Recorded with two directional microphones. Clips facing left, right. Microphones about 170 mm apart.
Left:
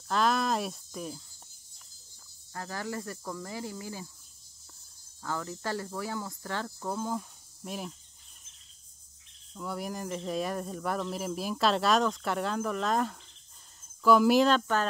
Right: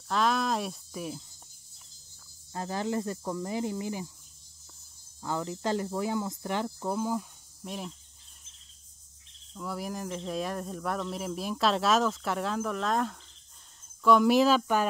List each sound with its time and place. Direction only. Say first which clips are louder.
0.1 s speech: even; centre (ahead or behind)
2.5 s speech: right 5 dB; 20° right (ahead or behind)
5.2 s speech: right 3 dB; 20° right (ahead or behind); by 7.9 s centre (ahead or behind)
9.5 s speech: even; centre (ahead or behind)